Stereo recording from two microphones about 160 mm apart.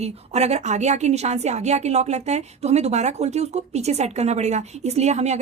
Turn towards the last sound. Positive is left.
turn(degrees=-45)  # may be behind; listen again after turning